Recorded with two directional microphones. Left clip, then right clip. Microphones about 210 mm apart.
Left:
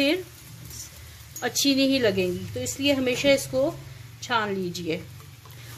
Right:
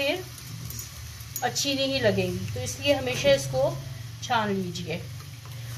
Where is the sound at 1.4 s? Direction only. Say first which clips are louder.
Left 3 dB; 55° left (ahead or behind).